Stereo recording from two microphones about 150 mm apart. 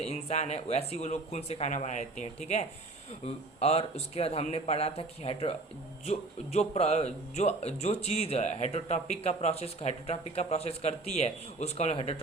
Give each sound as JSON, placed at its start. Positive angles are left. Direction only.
{"t": 0.0, "sound": "speech", "side_deg": 45}